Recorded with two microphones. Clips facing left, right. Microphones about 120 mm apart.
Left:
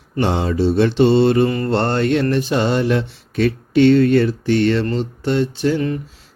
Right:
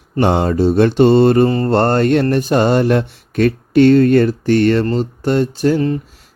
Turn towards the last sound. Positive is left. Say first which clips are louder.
# right 4 dB
turn(degrees=-35)  # may be behind; listen again after turning